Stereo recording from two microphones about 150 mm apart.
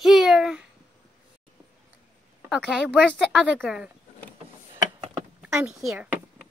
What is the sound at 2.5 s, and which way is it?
A woman's voice, 5° right (ahead or behind).